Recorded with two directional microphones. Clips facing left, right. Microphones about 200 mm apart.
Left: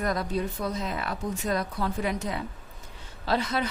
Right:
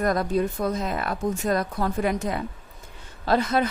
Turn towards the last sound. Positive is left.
turn(degrees=-50)  # may be behind; listen again after turning